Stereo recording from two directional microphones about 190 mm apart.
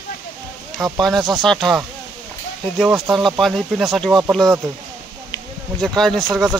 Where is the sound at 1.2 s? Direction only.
25° right (ahead or behind).